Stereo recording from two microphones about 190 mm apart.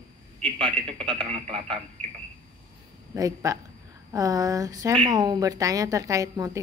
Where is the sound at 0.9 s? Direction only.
30° right (ahead or behind).